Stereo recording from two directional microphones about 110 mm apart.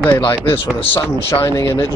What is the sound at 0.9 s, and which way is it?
Speech, 20° left (ahead or behind).